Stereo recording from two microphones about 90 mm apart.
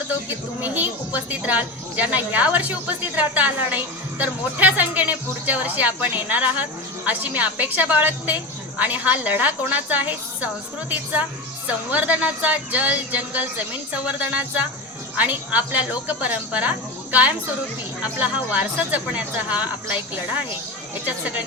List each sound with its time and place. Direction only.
0.6 s a woman's voice: 20° right (ahead or behind)